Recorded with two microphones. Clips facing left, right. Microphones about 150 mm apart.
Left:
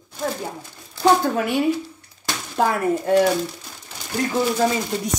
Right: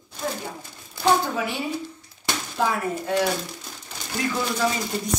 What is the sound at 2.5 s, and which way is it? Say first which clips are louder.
Speech: left 6 dB; 50° left (ahead or behind).